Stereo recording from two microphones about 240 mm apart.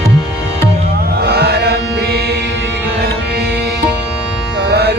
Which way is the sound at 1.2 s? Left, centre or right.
Right.